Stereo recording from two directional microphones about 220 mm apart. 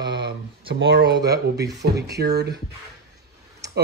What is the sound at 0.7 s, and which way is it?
Speech, 50° right (ahead or behind).